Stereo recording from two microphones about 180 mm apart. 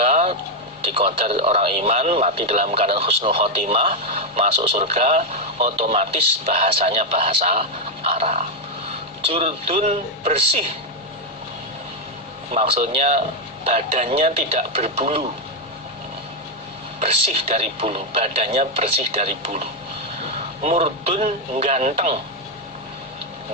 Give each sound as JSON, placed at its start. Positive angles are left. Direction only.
{"t": 0.0, "sound": "a sound", "side_deg": -35}
{"t": 0.8, "sound": "speech", "side_deg": -30}
{"t": 12.5, "sound": "speech", "side_deg": -35}
{"t": 17.0, "sound": "speech", "side_deg": -35}